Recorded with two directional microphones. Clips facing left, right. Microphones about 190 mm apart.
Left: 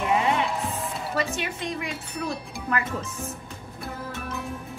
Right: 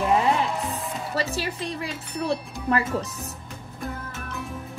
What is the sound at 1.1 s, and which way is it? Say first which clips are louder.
A woman's voice: right 1 dB; 35° right (ahead or behind).